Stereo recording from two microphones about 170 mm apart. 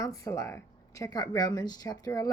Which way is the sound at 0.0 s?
20° left (ahead or behind).